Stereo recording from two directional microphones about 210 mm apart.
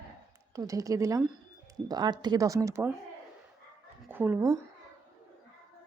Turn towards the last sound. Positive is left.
turn(degrees=-10)  # may be behind; listen again after turning